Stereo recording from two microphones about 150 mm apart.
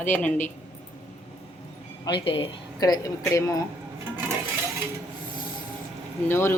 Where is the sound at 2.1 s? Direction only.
35° left (ahead or behind).